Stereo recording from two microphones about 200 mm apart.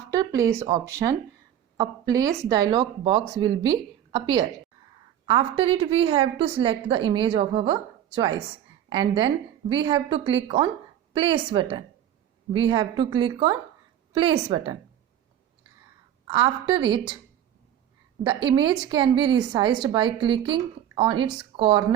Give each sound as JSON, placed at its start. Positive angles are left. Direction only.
{"t": 0.1, "sound": "a woman's voice", "side_deg": -15}
{"t": 16.2, "sound": "a woman's voice", "side_deg": -25}
{"t": 18.2, "sound": "a woman's voice", "side_deg": -25}